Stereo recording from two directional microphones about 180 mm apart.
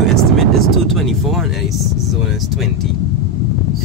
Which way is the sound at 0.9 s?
Centre (ahead or behind).